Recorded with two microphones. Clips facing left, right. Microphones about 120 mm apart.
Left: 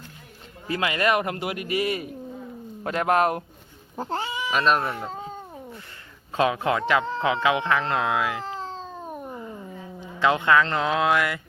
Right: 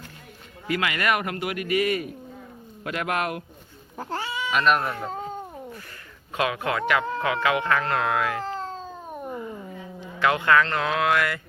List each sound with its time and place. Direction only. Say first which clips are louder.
0.7 s speech: left 2 dB; 30° left (ahead or behind)
3.9 s speech: left 2 dB; 20° left (ahead or behind)
4.5 s speech: even; 30° left (ahead or behind)
5.0 s cat: right 2 dB; centre (ahead or behind)
6.3 s speech: left 3 dB; 25° left (ahead or behind)
8.4 s cat: right 2 dB; centre (ahead or behind)
10.2 s speech: left 1 dB; 20° left (ahead or behind)